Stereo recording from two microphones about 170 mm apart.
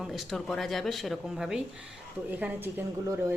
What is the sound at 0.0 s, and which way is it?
A woman's voice, centre (ahead or behind).